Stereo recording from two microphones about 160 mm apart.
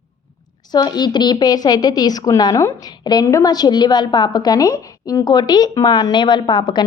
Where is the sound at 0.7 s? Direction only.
25° left (ahead or behind).